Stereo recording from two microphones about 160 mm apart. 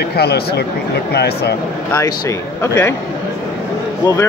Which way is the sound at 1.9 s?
15° left (ahead or behind).